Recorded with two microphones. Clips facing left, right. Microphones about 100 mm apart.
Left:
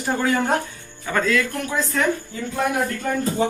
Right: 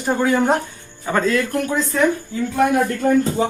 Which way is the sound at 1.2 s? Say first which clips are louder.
Right 2 dB; 40° right (ahead or behind).